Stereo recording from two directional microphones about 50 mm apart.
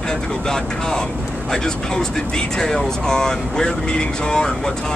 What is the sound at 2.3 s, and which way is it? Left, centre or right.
Speech, centre.